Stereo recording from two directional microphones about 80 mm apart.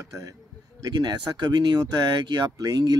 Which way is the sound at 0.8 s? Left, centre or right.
Right.